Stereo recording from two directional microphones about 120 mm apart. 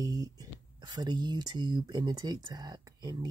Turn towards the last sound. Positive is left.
turn(degrees=-35)  # may be behind; listen again after turning